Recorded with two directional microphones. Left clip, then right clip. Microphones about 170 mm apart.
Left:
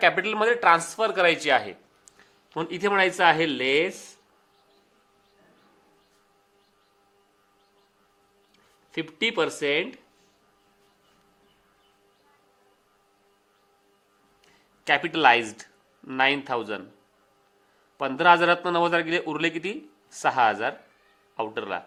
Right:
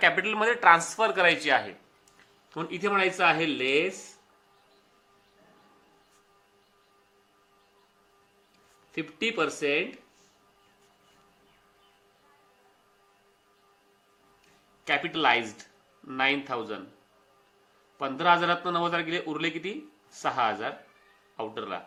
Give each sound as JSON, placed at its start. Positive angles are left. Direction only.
{"t": 0.0, "sound": "speech", "side_deg": 40}
{"t": 2.6, "sound": "a man's voice", "side_deg": 60}
{"t": 8.9, "sound": "a man's voice", "side_deg": 55}
{"t": 14.8, "sound": "a man's voice", "side_deg": 60}
{"t": 17.9, "sound": "a man's voice", "side_deg": 55}